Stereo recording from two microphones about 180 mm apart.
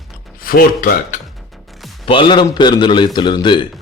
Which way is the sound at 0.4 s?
55° left (ahead or behind).